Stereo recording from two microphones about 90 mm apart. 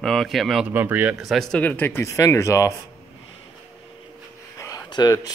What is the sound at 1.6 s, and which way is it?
Speech, 20° left (ahead or behind).